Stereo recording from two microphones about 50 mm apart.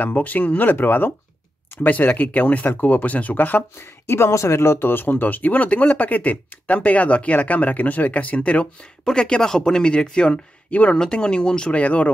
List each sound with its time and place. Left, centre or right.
0.0 s speech: left
3.8 s speech: left
4.3 s speech: left; by 11.8 s centre
11.8 s speech: left